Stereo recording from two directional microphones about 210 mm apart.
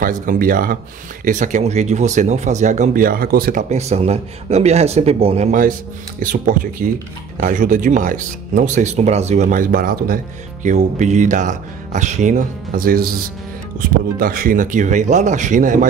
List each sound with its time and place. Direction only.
0.0 s speech: 40° right (ahead or behind)